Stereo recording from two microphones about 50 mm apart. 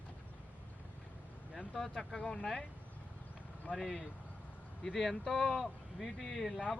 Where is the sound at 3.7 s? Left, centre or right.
Centre.